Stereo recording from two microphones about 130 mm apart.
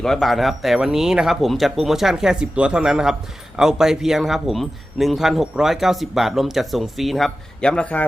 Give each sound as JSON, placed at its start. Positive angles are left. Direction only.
{"t": 0.0, "sound": "speech", "side_deg": 0}